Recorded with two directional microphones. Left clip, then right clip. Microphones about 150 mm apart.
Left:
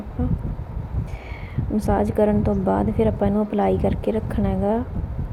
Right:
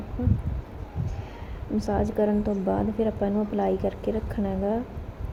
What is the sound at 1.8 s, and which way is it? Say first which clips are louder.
A woman's voice: left 5 dB; 20° left (ahead or behind).